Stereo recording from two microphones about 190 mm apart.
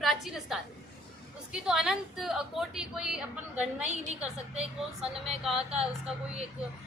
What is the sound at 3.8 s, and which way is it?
Speech, 35° right (ahead or behind).